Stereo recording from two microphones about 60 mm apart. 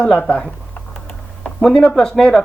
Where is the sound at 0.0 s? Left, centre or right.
Left.